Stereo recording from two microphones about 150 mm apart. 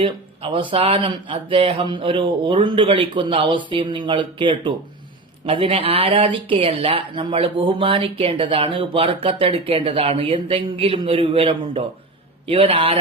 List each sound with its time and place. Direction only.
0.0 s speech: 35° right (ahead or behind)